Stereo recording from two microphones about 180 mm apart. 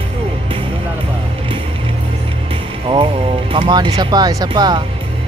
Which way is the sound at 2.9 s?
30° right (ahead or behind).